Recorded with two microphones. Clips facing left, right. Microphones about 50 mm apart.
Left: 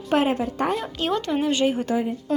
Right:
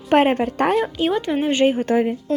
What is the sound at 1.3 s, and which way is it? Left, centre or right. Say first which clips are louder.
Speech: right 4 dB; right.